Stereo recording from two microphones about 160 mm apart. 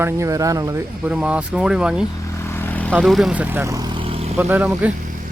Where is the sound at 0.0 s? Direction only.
20° right (ahead or behind).